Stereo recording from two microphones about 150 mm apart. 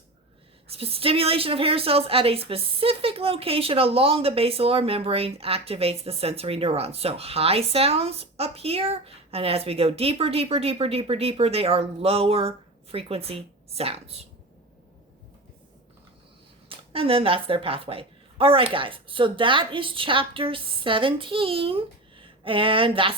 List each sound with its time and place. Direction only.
0.7 s a woman's voice: 40° right (ahead or behind)
16.6 s a woman's voice: 35° right (ahead or behind)